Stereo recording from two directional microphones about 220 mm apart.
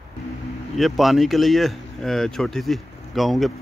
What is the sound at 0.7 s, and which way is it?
Speech, centre (ahead or behind).